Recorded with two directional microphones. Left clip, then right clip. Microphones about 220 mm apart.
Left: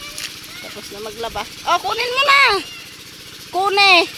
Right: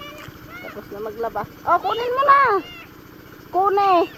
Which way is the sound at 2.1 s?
35° left (ahead or behind).